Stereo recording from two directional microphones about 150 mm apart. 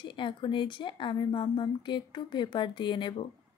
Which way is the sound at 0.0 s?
35° left (ahead or behind).